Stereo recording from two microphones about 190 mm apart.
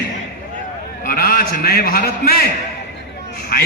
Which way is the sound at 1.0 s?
50° left (ahead or behind).